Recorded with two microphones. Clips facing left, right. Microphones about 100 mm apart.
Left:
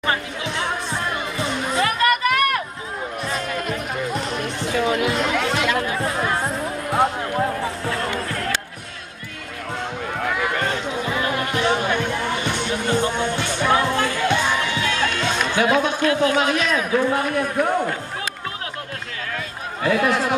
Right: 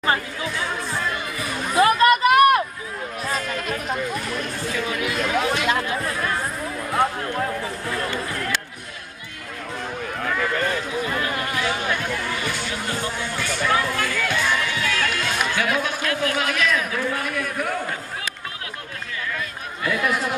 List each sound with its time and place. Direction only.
0.6 s music: 25° left (ahead or behind)
1.8 s a sound: 25° right (ahead or behind)
4.1 s chatter: 25° left (ahead or behind)
6.0 s music: 25° left (ahead or behind)
10.2 s run: 15° left (ahead or behind)
11.1 s music: centre (ahead or behind)
11.5 s music: 25° left (ahead or behind)
15.4 s a man's voice: 20° left (ahead or behind)
19.3 s a sound: 30° left (ahead or behind)